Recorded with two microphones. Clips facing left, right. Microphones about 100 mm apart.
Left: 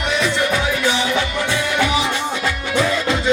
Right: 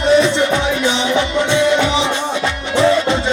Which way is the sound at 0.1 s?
25° right (ahead or behind).